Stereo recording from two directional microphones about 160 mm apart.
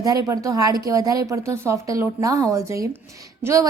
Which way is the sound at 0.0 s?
20° right (ahead or behind).